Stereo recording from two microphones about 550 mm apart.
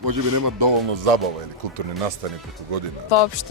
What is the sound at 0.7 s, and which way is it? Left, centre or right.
Speech, right.